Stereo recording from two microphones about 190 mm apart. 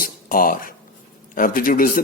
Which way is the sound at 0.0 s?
50° left (ahead or behind).